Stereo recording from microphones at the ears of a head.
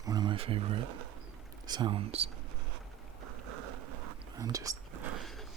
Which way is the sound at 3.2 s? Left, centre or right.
Right.